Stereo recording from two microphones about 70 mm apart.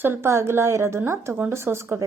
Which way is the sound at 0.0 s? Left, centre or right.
Right.